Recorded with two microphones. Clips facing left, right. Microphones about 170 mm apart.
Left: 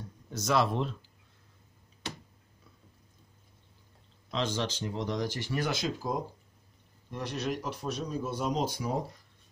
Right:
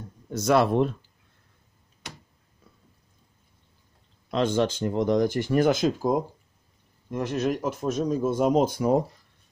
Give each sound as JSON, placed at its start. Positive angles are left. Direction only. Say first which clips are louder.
{"t": 0.3, "sound": "speech", "louder": "right 7 dB", "side_deg": -60}
{"t": 4.3, "sound": "speech", "louder": "right 9 dB", "side_deg": -55}